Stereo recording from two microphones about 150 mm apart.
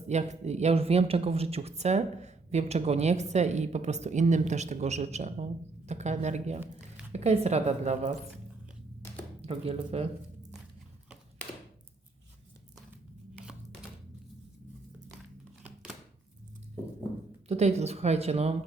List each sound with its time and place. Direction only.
0.1 s speech: 50° right (ahead or behind)
9.4 s speech: 40° right (ahead or behind)
17.5 s speech: 45° right (ahead or behind)